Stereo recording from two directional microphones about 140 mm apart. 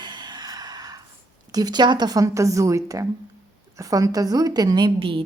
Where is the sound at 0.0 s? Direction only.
30° right (ahead or behind).